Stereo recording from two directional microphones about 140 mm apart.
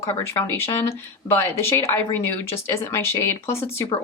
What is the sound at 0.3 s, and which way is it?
A woman's voice, 15° left (ahead or behind).